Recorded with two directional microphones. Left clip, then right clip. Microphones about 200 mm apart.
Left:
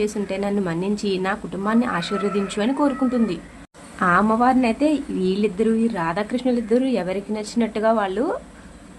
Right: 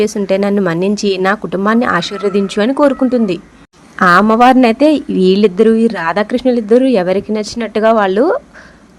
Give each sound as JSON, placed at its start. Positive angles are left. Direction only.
{"t": 0.0, "sound": "speech", "side_deg": -40}